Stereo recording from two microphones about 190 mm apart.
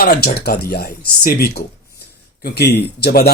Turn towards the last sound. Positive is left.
turn(degrees=55)  # may be behind; listen again after turning